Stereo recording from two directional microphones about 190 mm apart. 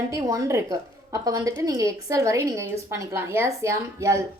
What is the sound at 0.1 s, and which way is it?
A woman's voice, 15° right (ahead or behind).